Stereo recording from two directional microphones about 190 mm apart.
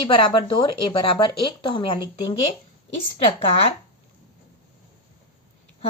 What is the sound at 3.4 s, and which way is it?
Speech, 30° left (ahead or behind).